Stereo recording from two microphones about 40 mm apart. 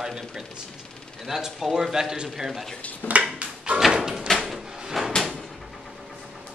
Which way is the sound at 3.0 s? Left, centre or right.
Left.